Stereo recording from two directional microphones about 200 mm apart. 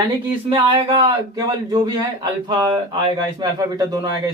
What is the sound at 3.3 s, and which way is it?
Speech, 20° right (ahead or behind).